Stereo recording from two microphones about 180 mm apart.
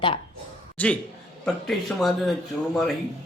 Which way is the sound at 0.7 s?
10° left (ahead or behind).